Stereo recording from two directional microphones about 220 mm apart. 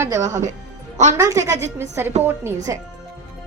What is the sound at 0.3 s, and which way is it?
Speech, 35° right (ahead or behind).